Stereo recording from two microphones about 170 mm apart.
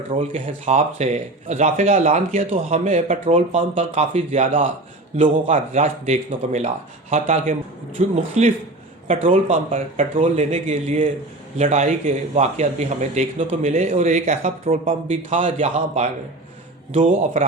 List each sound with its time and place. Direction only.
0.1 s speech: 45° right (ahead or behind)
14.8 s speech: 35° right (ahead or behind)
16.9 s speech: 45° right (ahead or behind)